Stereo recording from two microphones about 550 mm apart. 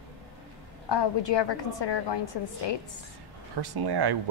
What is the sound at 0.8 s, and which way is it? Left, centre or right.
A woman's voice, left.